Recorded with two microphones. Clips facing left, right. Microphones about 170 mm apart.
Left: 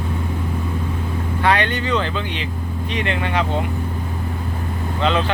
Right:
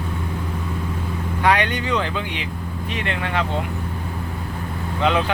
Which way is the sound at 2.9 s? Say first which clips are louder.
Left 3 dB; centre (ahead or behind).